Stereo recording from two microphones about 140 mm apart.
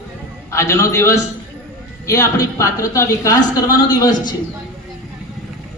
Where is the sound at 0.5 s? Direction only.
20° left (ahead or behind).